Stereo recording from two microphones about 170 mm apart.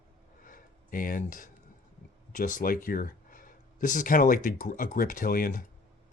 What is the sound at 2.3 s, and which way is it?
Speech, 50° left (ahead or behind).